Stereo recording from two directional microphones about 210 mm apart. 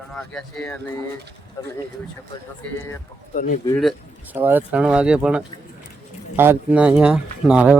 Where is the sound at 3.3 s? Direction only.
40° left (ahead or behind).